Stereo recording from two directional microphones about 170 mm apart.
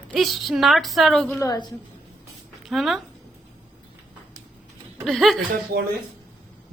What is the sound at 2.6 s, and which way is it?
Speech, centre (ahead or behind).